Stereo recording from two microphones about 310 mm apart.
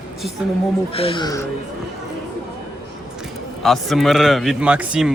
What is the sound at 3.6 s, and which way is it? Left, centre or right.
A man's voice, centre.